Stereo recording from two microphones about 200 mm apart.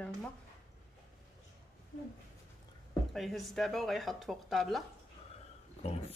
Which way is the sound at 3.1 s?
Centre (ahead or behind).